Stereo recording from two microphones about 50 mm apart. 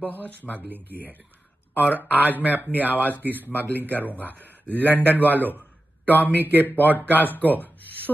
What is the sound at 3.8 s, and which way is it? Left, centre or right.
Speech, left.